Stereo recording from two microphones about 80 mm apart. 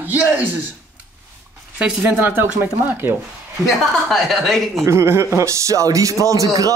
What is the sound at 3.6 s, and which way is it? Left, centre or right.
A woman's voice, centre.